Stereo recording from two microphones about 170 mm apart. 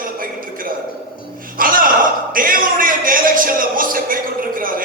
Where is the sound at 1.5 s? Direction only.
55° right (ahead or behind).